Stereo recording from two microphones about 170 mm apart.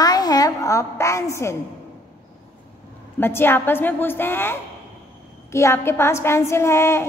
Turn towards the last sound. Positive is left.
turn(degrees=15)  # may be behind; listen again after turning